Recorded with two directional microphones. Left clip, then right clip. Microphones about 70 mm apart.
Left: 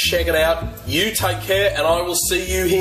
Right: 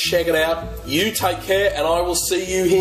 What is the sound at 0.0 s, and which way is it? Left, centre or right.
Speech, right.